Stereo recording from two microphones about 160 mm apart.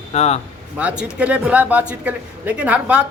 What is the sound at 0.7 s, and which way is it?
A man's voice, 10° right (ahead or behind).